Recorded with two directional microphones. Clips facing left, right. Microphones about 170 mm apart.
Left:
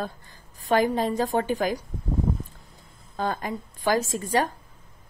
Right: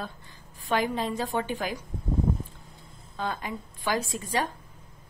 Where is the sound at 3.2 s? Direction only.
40° left (ahead or behind).